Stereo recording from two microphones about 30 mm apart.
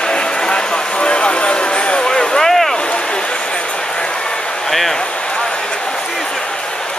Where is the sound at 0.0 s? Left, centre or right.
Left.